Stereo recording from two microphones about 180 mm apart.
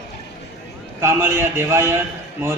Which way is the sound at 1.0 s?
15° right (ahead or behind).